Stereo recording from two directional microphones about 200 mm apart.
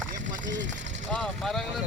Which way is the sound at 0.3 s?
40° right (ahead or behind).